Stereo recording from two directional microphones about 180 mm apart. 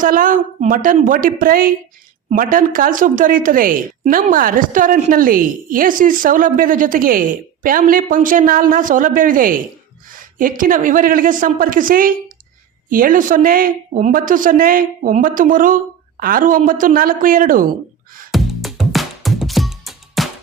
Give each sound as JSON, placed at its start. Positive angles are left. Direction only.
{"t": 0.0, "sound": "a woman's voice", "side_deg": -50}
{"t": 18.3, "sound": "music", "side_deg": 0}